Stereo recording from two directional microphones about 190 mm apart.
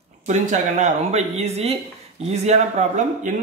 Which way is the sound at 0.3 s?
40° right (ahead or behind).